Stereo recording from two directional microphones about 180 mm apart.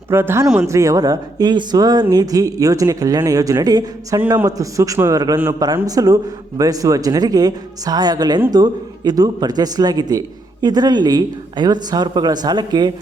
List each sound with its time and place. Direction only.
0.1 s speech: 15° right (ahead or behind)
0.7 s speech: 20° right (ahead or behind)